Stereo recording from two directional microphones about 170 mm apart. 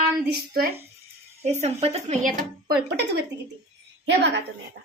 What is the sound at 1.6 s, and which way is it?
Speech, 40° right (ahead or behind).